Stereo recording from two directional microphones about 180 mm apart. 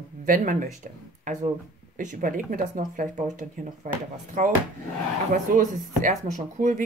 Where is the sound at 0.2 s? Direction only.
50° right (ahead or behind).